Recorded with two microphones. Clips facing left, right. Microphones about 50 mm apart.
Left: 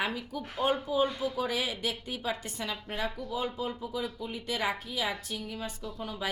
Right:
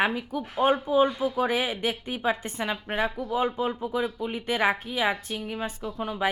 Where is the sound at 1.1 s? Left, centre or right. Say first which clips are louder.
Right 5 dB; centre.